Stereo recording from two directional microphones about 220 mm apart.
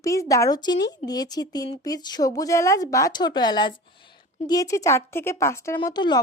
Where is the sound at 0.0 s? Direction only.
15° left (ahead or behind).